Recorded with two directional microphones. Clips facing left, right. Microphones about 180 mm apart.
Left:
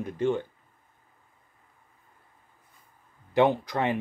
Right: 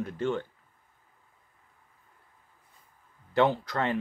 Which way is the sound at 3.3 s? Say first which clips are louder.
Left 2 dB; 15° left (ahead or behind).